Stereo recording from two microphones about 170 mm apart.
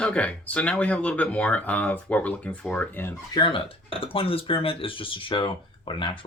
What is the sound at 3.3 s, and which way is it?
Speech, 30° left (ahead or behind).